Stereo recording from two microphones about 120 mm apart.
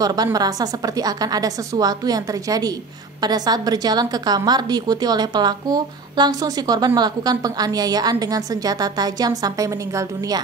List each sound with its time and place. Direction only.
0.0 s a woman's voice: 30° right (ahead or behind)